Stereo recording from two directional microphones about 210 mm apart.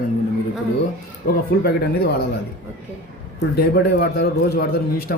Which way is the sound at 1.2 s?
40° left (ahead or behind).